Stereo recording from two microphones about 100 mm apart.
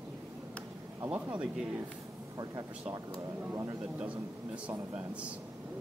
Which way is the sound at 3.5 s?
30° right (ahead or behind).